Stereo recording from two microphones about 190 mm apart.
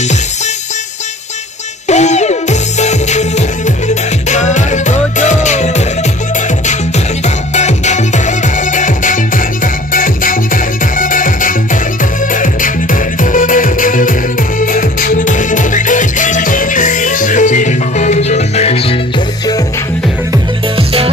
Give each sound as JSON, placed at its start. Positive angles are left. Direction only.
{"t": 1.9, "sound": "music", "side_deg": 35}
{"t": 7.2, "sound": "music", "side_deg": 35}
{"t": 20.7, "sound": "music", "side_deg": -30}